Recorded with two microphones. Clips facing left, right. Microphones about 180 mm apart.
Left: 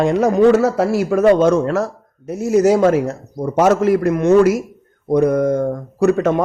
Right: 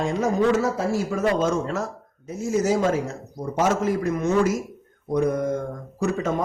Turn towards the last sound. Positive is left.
turn(degrees=70)  # may be behind; listen again after turning